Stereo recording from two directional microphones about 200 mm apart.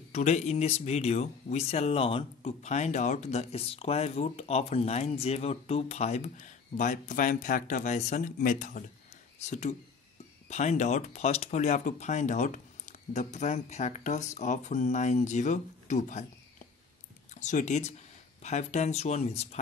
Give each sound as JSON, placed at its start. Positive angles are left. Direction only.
{"t": 0.1, "sound": "speech", "side_deg": 35}